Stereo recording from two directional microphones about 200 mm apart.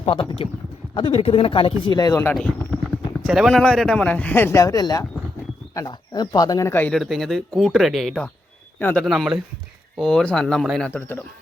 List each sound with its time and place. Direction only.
0.0 s speech: 25° left (ahead or behind); by 9.0 s 10° left (ahead or behind)
9.0 s speech: centre (ahead or behind)